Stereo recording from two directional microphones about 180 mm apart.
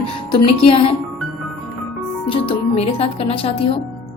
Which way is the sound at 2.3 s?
30° left (ahead or behind).